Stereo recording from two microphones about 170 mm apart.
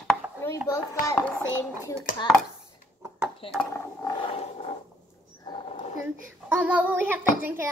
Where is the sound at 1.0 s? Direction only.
20° left (ahead or behind).